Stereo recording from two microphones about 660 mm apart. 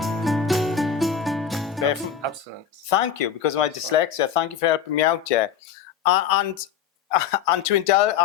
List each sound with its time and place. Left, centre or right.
0.0 s music: centre
2.9 s speech: left